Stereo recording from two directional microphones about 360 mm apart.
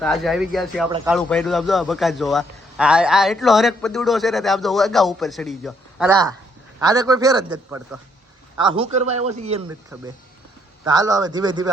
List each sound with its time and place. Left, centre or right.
0.0 s a man's voice: centre
0.9 s a man's voice: centre
1.1 s a man's voice: centre
9.9 s a man's voice: centre